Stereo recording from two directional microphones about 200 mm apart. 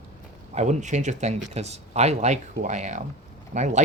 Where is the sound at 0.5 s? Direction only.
35° right (ahead or behind).